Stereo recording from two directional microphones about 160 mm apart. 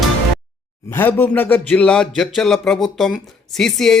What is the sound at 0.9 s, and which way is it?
Speech, 15° left (ahead or behind).